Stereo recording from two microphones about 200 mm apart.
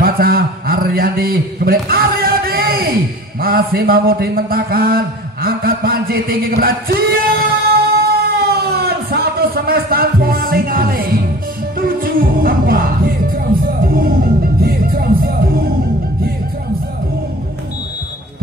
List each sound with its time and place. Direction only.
0.0 s a man's voice: 50° right (ahead or behind)
7.2 s a sound: 50° right (ahead or behind)
11.8 s music: 45° right (ahead or behind)